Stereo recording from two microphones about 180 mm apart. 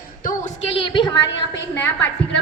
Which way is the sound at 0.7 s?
30° left (ahead or behind).